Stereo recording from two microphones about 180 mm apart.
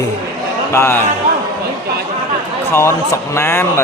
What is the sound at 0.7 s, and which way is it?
Speech, 15° left (ahead or behind).